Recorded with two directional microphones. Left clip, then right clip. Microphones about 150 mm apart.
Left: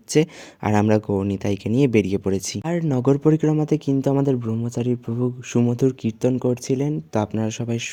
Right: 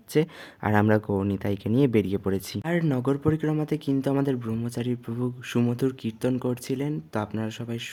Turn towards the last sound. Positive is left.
turn(degrees=25)  # may be behind; listen again after turning